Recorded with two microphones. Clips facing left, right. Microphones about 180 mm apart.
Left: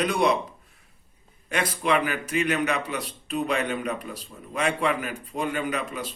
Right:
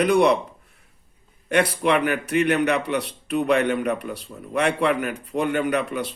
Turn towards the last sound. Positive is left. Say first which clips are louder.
# right 6 dB
turn(degrees=-65)  # may be behind; listen again after turning